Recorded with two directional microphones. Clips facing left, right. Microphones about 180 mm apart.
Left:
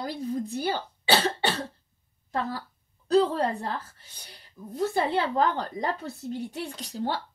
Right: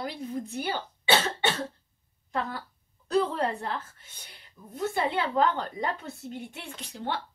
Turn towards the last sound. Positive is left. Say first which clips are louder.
# left 3 dB
turn(degrees=35)  # may be behind; listen again after turning